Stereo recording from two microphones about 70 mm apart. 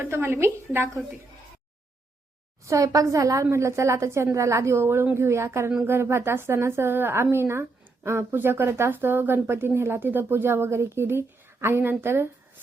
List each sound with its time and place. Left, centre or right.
0.0 s speech: right
2.6 s a woman's voice: right